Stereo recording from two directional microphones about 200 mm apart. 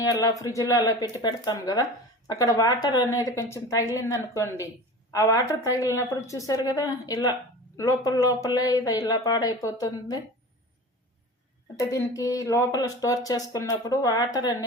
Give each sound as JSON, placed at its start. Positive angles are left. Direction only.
{"t": 0.0, "sound": "speech", "side_deg": 15}
{"t": 11.8, "sound": "speech", "side_deg": 15}